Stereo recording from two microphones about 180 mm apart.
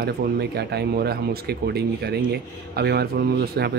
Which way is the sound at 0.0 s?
65° right (ahead or behind).